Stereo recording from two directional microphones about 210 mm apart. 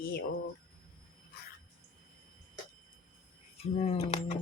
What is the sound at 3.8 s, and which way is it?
Speech, 30° left (ahead or behind).